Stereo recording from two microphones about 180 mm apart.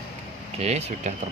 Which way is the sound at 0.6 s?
35° right (ahead or behind).